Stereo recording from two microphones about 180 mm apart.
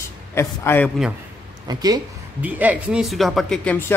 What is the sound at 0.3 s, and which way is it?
Speech, 15° left (ahead or behind).